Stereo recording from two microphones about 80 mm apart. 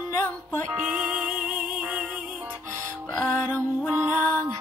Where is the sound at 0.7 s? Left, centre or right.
Centre.